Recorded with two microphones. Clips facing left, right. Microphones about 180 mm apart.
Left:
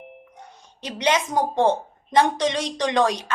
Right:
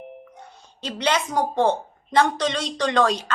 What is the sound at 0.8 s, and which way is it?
A woman's voice, 15° left (ahead or behind).